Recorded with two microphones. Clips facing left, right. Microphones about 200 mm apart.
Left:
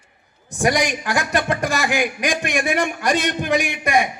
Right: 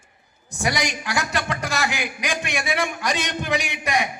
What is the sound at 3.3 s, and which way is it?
Speech, 55° left (ahead or behind).